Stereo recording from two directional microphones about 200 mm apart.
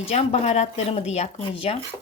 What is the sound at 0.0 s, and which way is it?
A woman's voice, 30° left (ahead or behind).